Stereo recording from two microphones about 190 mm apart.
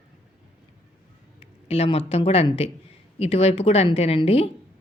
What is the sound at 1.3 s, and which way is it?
A man's voice, 30° left (ahead or behind).